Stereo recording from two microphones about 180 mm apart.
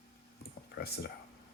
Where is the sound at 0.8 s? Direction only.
60° left (ahead or behind).